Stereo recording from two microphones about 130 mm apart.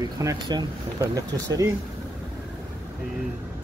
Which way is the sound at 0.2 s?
30° right (ahead or behind).